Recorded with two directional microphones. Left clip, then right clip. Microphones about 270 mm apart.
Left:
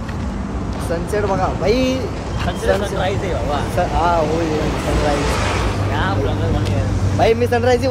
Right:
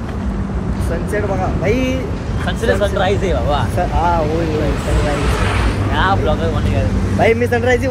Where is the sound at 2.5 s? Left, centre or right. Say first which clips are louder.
Right 2 dB; centre.